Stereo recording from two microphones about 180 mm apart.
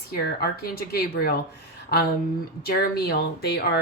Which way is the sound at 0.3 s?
60° left (ahead or behind).